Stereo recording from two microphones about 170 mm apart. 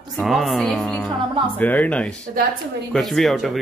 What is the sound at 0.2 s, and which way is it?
Speech, centre (ahead or behind).